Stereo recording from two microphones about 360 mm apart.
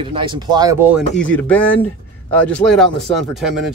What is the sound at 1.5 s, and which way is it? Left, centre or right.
Speech, centre.